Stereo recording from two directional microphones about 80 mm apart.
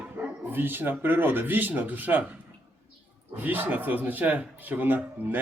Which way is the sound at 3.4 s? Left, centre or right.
Right.